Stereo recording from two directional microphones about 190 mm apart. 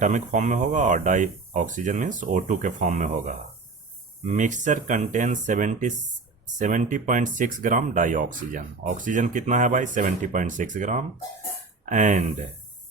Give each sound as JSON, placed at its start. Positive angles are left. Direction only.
{"t": 0.0, "sound": "speech", "side_deg": -40}